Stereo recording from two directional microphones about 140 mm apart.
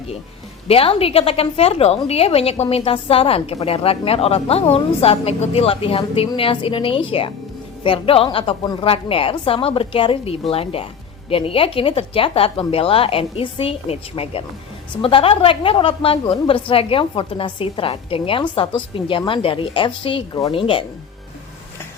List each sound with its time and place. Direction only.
0.7 s a woman's voice: 45° left (ahead or behind)